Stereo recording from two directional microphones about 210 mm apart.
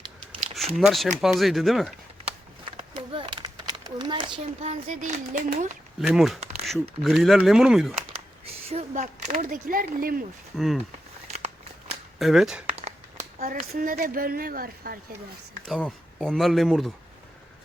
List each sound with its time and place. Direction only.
0.8 s speech: centre (ahead or behind)
2.2 s a sound: 25° right (ahead or behind)
6.0 s speech: centre (ahead or behind)
8.7 s speech: 30° right (ahead or behind)
11.3 s a sound: 30° right (ahead or behind)
12.2 s speech: centre (ahead or behind)
13.4 s speech: 40° right (ahead or behind)
15.6 s speech: centre (ahead or behind)